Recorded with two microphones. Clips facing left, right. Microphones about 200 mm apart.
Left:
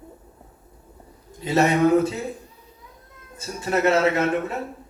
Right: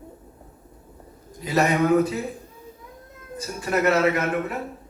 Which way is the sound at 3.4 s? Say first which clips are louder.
Left 1 dB; 25° left (ahead or behind).